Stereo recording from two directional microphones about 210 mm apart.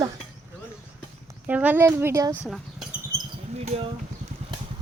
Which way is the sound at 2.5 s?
Centre (ahead or behind).